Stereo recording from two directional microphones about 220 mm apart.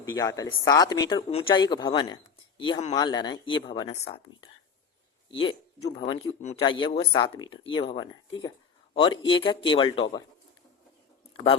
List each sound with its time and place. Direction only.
0.0 s speech: 15° left (ahead or behind)